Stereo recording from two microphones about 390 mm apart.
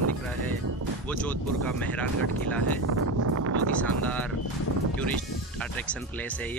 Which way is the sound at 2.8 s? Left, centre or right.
Right.